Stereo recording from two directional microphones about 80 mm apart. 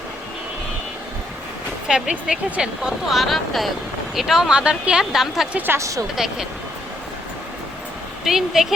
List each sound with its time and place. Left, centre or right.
1.9 s speech: centre
5.7 s speech: right
6.1 s speech: centre
8.2 s speech: centre